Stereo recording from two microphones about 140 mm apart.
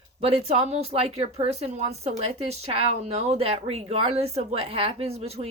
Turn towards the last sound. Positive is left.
turn(degrees=-45)  # may be behind; listen again after turning